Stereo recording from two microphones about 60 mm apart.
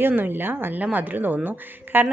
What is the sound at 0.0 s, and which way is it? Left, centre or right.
A woman's voice, right.